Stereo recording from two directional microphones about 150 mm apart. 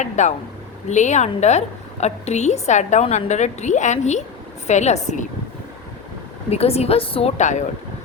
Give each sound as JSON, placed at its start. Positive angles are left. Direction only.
{"t": 0.0, "sound": "a woman's voice", "side_deg": 50}
{"t": 6.5, "sound": "a woman's voice", "side_deg": 45}